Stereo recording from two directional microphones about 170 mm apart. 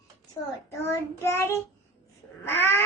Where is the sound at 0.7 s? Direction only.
15° left (ahead or behind).